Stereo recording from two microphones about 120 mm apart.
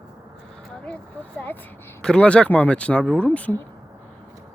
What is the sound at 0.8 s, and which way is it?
Speech, 10° left (ahead or behind).